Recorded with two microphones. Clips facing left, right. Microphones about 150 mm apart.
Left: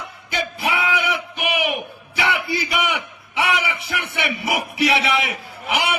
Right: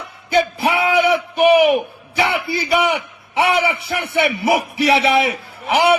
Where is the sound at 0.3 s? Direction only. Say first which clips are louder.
Right 8 dB; 35° right (ahead or behind).